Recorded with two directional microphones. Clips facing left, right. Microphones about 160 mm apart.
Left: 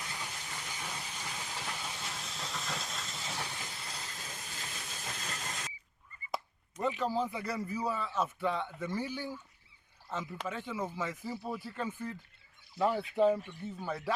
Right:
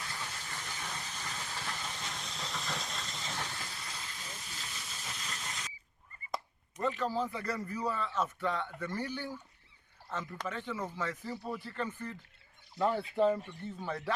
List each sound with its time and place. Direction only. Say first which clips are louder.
0.0 s steam: even; 15° left (ahead or behind)
4.7 s vehicle: left 2 dB; 50° left (ahead or behind)
6.3 s speech: left 1 dB; 10° left (ahead or behind)